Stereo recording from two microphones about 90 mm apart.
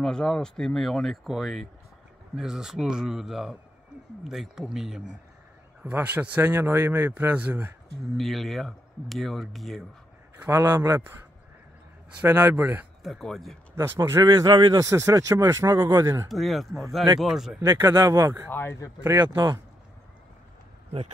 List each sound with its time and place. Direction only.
0.0 s speech: 5° left (ahead or behind)
5.9 s speech: 20° right (ahead or behind)
8.2 s speech: centre (ahead or behind)
10.3 s a man's voice: 20° right (ahead or behind)
10.6 s speech: 40° right (ahead or behind)
12.2 s speech: 20° right (ahead or behind)
13.0 s speech: centre (ahead or behind)
13.7 s speech: 30° right (ahead or behind)
14.2 s speech: 45° right (ahead or behind)
14.8 s speech: 35° right (ahead or behind)
16.3 s speech: centre (ahead or behind)
17.7 s speech: 40° right (ahead or behind)
18.5 s speech: 25° left (ahead or behind)
19.1 s speech: 50° right (ahead or behind)